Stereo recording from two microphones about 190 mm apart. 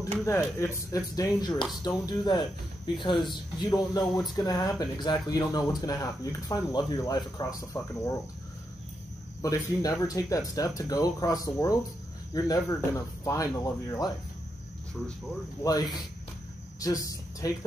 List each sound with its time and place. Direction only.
0.0 s speech: 15° left (ahead or behind)
9.4 s speech: 20° left (ahead or behind)
15.6 s speech: 20° left (ahead or behind)